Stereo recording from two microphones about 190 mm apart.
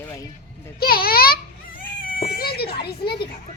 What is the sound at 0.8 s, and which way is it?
Baby cry, 50° left (ahead or behind).